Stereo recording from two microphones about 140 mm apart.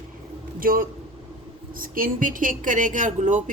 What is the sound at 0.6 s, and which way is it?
A woman's voice, 90° right.